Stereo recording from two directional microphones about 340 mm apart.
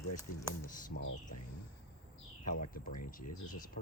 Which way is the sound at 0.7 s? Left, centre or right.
Left.